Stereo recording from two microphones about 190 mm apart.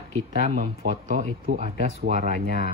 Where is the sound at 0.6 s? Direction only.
45° right (ahead or behind).